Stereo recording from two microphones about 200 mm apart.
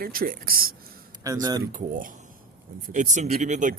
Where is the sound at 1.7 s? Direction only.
40° right (ahead or behind).